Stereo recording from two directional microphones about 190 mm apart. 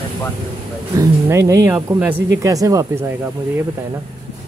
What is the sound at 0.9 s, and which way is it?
Speech, 15° right (ahead or behind).